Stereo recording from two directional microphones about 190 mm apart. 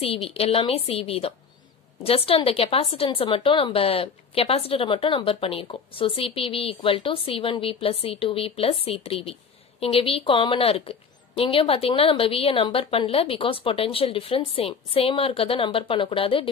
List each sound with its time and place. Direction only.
0.0 s a woman's voice: 30° left (ahead or behind)